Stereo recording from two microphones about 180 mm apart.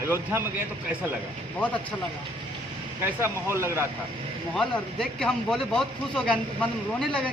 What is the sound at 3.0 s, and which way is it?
Speech, 15° right (ahead or behind).